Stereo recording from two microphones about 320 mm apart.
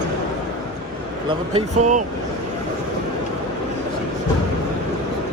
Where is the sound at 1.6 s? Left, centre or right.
Right.